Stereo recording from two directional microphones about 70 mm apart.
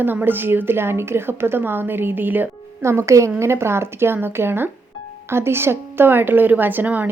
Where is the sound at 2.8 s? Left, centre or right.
Right.